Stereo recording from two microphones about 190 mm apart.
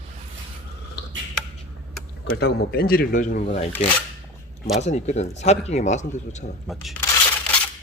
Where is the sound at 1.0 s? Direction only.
60° left (ahead or behind).